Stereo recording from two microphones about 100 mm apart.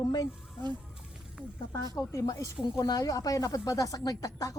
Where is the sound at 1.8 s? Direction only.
35° left (ahead or behind).